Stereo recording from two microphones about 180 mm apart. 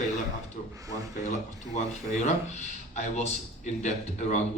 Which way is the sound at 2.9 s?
40° left (ahead or behind).